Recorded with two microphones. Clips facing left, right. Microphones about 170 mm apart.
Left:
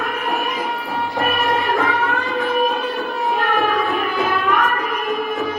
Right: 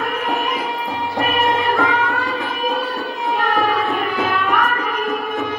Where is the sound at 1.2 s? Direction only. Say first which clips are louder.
Right 2 dB; 20° right (ahead or behind).